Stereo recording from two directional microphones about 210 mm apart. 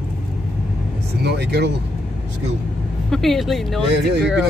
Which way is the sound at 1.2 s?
50° right (ahead or behind).